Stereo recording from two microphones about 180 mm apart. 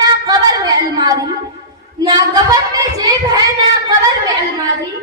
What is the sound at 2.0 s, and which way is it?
A woman's voice, 25° right (ahead or behind).